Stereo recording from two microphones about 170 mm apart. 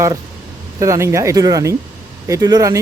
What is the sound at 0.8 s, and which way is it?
Speech, 15° right (ahead or behind).